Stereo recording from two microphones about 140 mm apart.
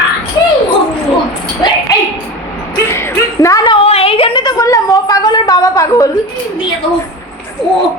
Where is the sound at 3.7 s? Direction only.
40° left (ahead or behind); by 6.0 s 25° left (ahead or behind).